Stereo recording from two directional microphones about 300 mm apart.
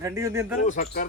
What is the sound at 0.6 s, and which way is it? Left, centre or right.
Speech, left.